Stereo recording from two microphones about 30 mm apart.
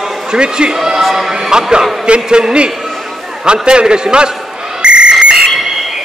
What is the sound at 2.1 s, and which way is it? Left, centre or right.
A man's voice, right.